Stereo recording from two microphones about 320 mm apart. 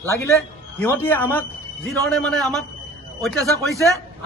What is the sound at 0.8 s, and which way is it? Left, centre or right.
A man's voice, centre.